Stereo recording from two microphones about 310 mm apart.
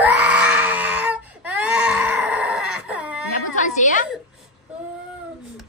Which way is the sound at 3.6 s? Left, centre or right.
Left.